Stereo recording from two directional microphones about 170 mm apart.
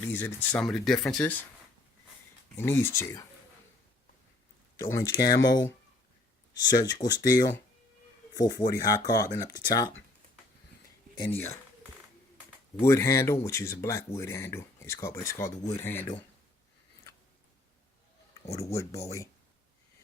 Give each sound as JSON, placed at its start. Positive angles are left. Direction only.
{"t": 0.1, "sound": "speech", "side_deg": 10}
{"t": 2.6, "sound": "speech", "side_deg": 15}
{"t": 4.9, "sound": "speech", "side_deg": 20}
{"t": 6.6, "sound": "speech", "side_deg": 25}
{"t": 11.2, "sound": "speech", "side_deg": 15}
{"t": 12.8, "sound": "speech", "side_deg": 15}
{"t": 18.5, "sound": "speech", "side_deg": 20}